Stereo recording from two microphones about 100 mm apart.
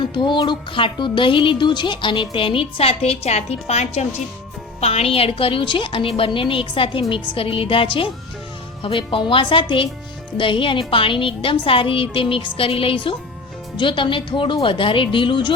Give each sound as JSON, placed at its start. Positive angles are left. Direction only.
{"t": 0.0, "sound": "speech", "side_deg": 50}